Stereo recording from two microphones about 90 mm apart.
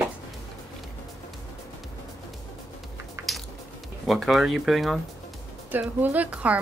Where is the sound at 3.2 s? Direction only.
30° right (ahead or behind).